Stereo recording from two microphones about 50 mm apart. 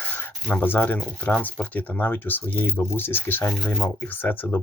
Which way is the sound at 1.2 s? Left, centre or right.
Left.